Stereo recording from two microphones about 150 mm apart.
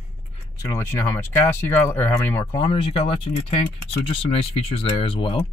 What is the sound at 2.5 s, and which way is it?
Speech, 30° left (ahead or behind).